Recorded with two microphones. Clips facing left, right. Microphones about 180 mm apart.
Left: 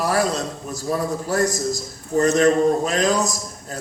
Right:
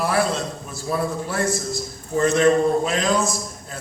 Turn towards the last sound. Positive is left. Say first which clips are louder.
# right 2 dB
turn(degrees=40)  # may be behind; listen again after turning